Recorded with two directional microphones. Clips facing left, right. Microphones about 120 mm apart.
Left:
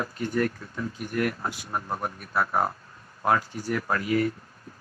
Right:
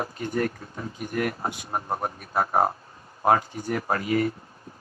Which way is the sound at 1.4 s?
50° right (ahead or behind).